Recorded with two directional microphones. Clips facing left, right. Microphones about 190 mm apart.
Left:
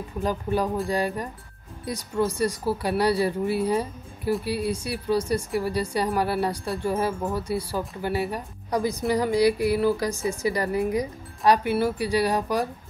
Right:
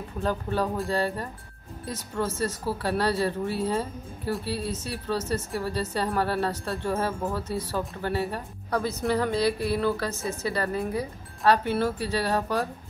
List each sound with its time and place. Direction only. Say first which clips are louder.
0.2 s speech: left 2 dB; 15° left (ahead or behind)